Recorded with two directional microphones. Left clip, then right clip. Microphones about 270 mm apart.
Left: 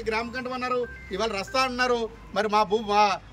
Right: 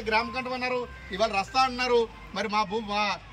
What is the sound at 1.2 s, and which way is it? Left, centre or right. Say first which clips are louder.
A man's voice: right 2 dB; left.